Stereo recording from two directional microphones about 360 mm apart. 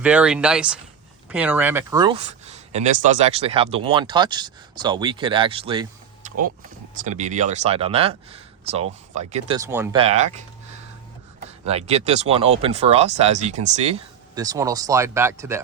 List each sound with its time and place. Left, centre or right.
0.0 s speech: centre
11.4 s speech: centre